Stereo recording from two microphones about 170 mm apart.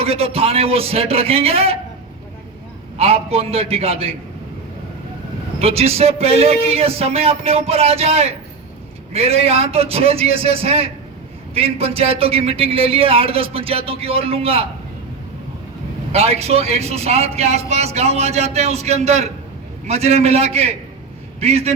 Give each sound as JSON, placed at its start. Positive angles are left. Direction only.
{"t": 0.0, "sound": "a man's voice", "side_deg": -35}
{"t": 3.0, "sound": "a man's voice", "side_deg": -35}
{"t": 5.5, "sound": "a man's voice", "side_deg": -35}
{"t": 16.1, "sound": "a man's voice", "side_deg": -35}